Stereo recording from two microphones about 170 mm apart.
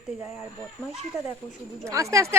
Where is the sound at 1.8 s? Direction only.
20° right (ahead or behind).